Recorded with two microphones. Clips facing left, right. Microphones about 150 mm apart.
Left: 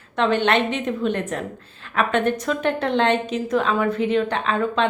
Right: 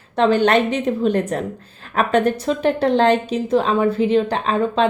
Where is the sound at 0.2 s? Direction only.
40° right (ahead or behind).